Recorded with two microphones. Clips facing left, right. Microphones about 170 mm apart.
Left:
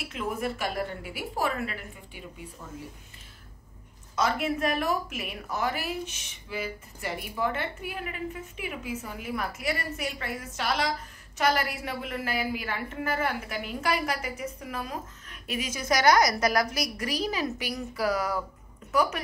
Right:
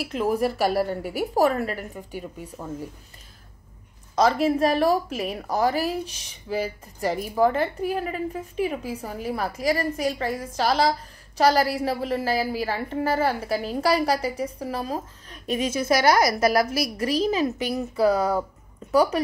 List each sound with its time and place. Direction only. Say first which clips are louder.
0.1 s a woman's voice: right 8 dB; 35° right (ahead or behind)
4.1 s a woman's voice: right 7 dB; 35° right (ahead or behind)
15.6 s a woman's voice: right 3 dB; 15° left (ahead or behind)
17.3 s a woman's voice: right 7 dB; 20° right (ahead or behind)